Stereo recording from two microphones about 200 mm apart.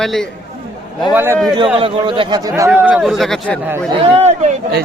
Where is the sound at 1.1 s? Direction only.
10° right (ahead or behind).